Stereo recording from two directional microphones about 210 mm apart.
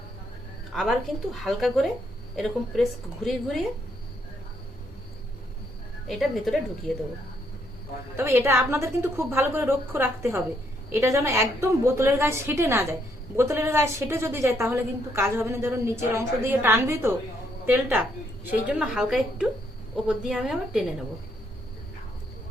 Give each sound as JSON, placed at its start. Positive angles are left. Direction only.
{"t": 0.7, "sound": "speech", "side_deg": 0}
{"t": 6.1, "sound": "speech", "side_deg": 0}
{"t": 8.1, "sound": "a woman's voice", "side_deg": -10}